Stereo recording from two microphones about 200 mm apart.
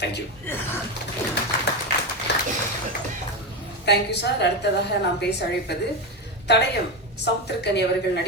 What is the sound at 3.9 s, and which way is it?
Speech, 55° left (ahead or behind).